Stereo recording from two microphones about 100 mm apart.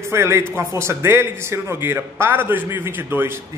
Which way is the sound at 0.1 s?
25° right (ahead or behind).